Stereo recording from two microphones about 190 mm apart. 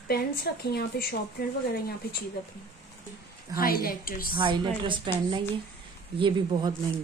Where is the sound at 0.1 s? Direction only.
55° left (ahead or behind).